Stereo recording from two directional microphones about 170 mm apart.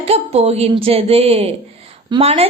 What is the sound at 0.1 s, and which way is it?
Speech, 40° right (ahead or behind).